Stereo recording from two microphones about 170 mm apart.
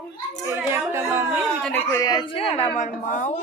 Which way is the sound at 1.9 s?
20° left (ahead or behind).